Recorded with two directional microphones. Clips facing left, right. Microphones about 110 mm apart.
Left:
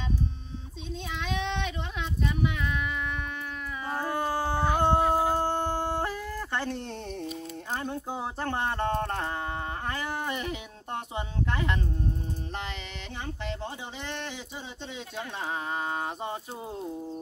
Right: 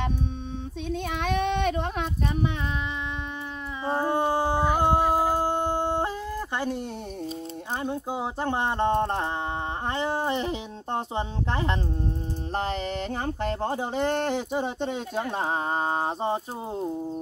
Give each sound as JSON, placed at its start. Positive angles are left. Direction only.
{"t": 0.8, "sound": "child singing", "side_deg": -55}
{"t": 3.8, "sound": "howl", "side_deg": -25}
{"t": 7.7, "sound": "speech", "side_deg": -15}
{"t": 12.5, "sound": "a sound", "side_deg": -40}